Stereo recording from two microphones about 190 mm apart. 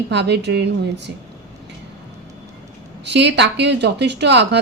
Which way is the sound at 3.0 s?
65° right (ahead or behind).